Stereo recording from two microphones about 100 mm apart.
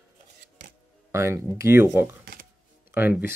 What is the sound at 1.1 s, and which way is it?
Speech, 25° right (ahead or behind).